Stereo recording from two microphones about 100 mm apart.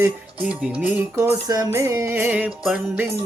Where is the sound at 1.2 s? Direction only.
35° right (ahead or behind); by 2.5 s 15° right (ahead or behind).